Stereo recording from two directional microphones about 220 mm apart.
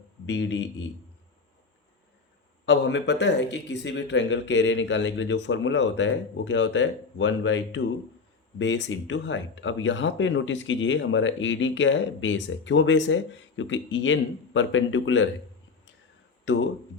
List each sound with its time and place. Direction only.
0.3 s speech: 55° left (ahead or behind)
2.6 s speech: 55° left (ahead or behind)